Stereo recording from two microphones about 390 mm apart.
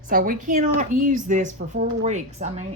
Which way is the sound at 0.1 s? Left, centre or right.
Right.